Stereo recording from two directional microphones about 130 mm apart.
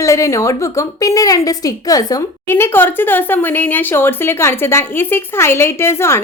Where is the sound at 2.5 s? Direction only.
15° left (ahead or behind).